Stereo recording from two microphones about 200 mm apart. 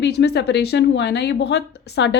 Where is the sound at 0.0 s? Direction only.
55° left (ahead or behind).